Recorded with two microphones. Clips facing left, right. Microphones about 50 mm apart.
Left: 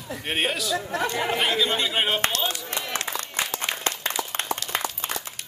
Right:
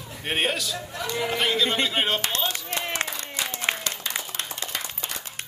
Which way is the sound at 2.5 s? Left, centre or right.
Right.